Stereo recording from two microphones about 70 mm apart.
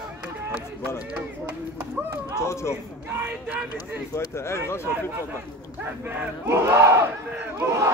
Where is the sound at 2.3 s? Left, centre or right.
Left.